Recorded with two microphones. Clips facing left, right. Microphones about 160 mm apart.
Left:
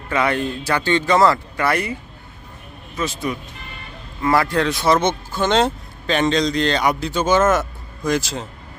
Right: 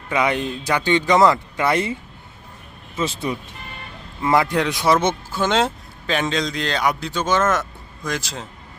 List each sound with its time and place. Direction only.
0.1 s speech: 15° right (ahead or behind); by 8.4 s centre (ahead or behind)